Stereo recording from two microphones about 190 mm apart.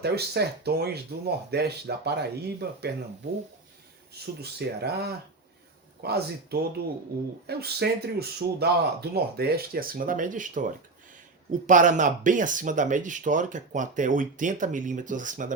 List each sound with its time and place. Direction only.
0.0 s speech: 55° right (ahead or behind)
4.1 s speech: 60° right (ahead or behind); by 15.5 s 40° right (ahead or behind)